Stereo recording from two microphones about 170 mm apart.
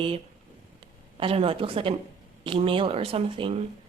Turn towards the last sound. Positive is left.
turn(degrees=-35)  # may be behind; listen again after turning